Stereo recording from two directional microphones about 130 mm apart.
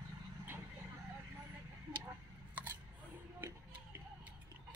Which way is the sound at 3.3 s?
20° right (ahead or behind).